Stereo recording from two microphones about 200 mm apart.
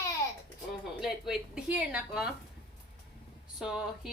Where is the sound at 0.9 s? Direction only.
Centre (ahead or behind).